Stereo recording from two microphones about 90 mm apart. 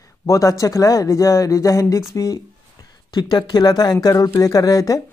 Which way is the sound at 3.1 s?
55° left (ahead or behind).